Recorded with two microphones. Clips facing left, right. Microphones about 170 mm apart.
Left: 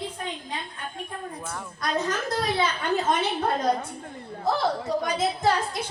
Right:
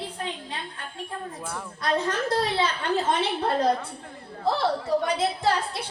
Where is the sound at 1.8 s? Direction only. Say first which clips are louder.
Right 2 dB; 30° right (ahead or behind).